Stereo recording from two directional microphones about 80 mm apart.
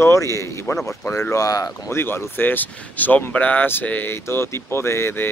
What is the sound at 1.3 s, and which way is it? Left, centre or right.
Speech, left.